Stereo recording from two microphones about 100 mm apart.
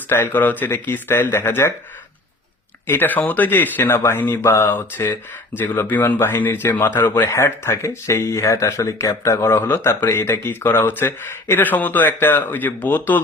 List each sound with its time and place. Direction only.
0.1 s speech: 20° left (ahead or behind)
2.8 s speech: 20° left (ahead or behind)